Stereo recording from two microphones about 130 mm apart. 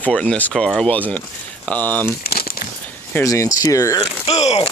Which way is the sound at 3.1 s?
25° left (ahead or behind).